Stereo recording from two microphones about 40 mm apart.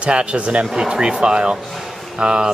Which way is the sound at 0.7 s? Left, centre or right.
Centre.